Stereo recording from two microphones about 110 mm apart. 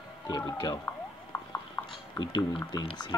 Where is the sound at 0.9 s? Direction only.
20° left (ahead or behind).